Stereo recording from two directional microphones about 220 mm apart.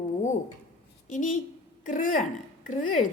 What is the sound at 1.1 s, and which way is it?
A woman's voice, 35° left (ahead or behind).